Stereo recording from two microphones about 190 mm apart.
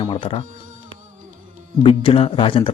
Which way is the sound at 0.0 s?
25° left (ahead or behind).